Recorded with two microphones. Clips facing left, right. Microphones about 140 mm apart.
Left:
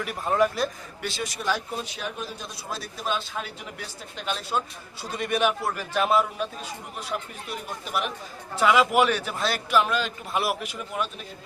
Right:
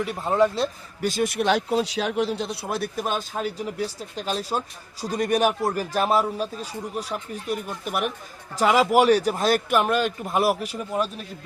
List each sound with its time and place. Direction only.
0.0 s speech: 25° right (ahead or behind)
1.0 s speech: 50° right (ahead or behind)
8.5 s a man's voice: 35° right (ahead or behind)